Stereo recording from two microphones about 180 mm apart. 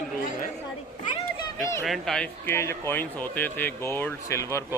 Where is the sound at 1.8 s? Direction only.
Centre (ahead or behind).